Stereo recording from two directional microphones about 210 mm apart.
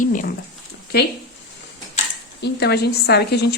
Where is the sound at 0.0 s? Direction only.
40° left (ahead or behind).